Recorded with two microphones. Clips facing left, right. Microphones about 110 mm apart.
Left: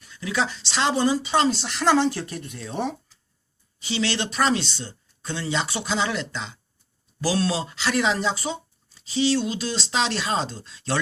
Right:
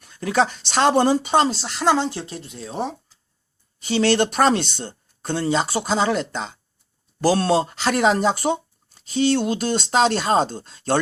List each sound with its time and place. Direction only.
0.0 s speech: 50° right (ahead or behind)
1.4 s speech: 35° right (ahead or behind)
1.7 s speech: 20° right (ahead or behind)
3.8 s speech: 50° right (ahead or behind)